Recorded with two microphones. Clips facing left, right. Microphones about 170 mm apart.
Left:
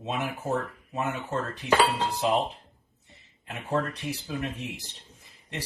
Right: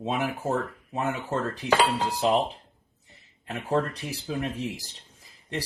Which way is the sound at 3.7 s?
35° right (ahead or behind).